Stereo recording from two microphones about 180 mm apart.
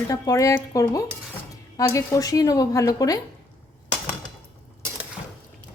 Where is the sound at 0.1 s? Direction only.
20° left (ahead or behind).